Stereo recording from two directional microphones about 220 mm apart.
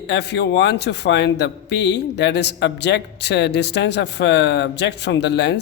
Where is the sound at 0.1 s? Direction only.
50° left (ahead or behind).